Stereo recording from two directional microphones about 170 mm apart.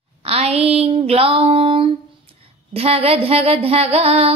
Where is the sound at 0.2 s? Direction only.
35° right (ahead or behind).